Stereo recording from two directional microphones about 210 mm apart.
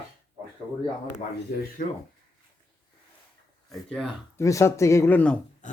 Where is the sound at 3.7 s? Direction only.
Centre (ahead or behind).